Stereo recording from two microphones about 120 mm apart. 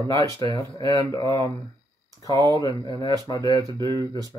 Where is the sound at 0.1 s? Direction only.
30° left (ahead or behind).